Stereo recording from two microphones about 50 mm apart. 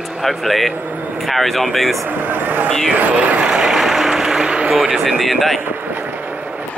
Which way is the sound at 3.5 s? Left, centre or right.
Centre.